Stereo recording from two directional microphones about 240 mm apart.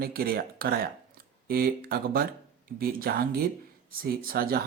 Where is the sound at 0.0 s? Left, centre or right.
Right.